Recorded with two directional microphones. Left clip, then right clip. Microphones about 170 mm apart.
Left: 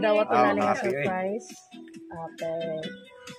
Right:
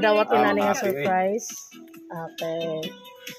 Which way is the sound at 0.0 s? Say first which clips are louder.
Right 2 dB; 60° right (ahead or behind).